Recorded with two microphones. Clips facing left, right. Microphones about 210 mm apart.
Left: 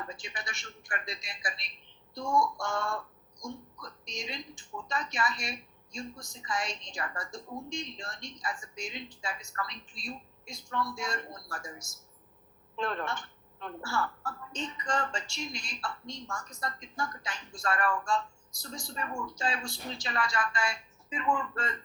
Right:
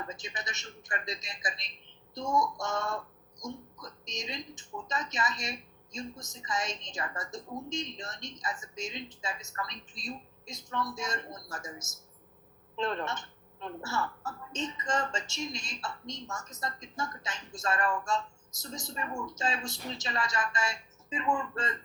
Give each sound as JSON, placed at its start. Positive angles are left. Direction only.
{"t": 0.1, "sound": "speech", "side_deg": -20}